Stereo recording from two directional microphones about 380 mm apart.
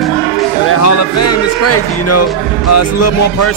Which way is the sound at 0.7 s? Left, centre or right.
Left.